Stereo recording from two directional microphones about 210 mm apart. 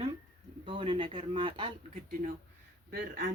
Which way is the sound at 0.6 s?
25° right (ahead or behind).